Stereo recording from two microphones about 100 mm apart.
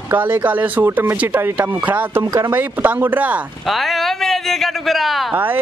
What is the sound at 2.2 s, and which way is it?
Speech, 35° right (ahead or behind).